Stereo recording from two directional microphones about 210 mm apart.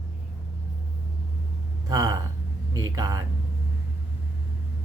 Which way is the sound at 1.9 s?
15° right (ahead or behind).